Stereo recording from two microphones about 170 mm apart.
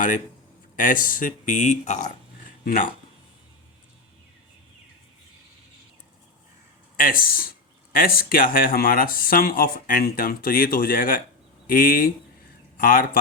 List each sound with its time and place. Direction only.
0.8 s speech: 50° left (ahead or behind)
6.9 s speech: 55° left (ahead or behind)